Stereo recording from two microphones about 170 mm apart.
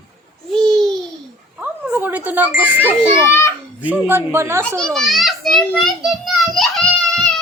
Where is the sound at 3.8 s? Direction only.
10° right (ahead or behind).